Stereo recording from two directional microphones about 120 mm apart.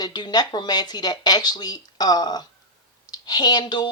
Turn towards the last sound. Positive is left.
turn(degrees=35)  # may be behind; listen again after turning